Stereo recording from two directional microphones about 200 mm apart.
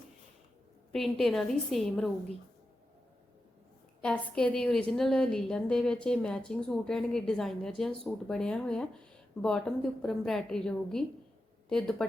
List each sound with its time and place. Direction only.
0.9 s a woman's voice: centre (ahead or behind)
4.0 s a woman's voice: 5° left (ahead or behind)